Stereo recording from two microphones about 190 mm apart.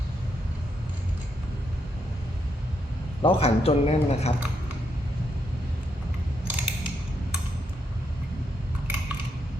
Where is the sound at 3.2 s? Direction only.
30° left (ahead or behind).